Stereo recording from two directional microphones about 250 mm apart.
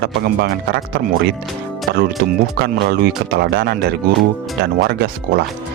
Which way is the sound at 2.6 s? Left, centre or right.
Right.